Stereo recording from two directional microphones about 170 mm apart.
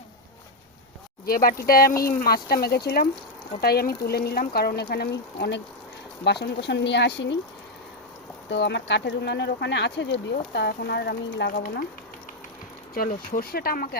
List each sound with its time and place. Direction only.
1.2 s speech: 60° left (ahead or behind); by 7.3 s 90° left
8.4 s speech: 90° left; by 11.7 s 60° left (ahead or behind)
12.9 s speech: 55° left (ahead or behind)